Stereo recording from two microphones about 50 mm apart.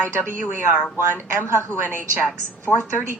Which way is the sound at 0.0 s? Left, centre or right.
Right.